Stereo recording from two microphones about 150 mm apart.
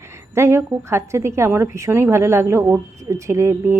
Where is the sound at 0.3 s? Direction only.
20° right (ahead or behind).